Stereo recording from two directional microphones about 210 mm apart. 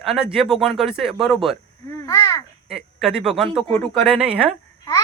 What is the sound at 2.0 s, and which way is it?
Babbling, 15° left (ahead or behind).